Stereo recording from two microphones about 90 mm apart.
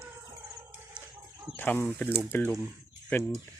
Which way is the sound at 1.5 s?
20° left (ahead or behind).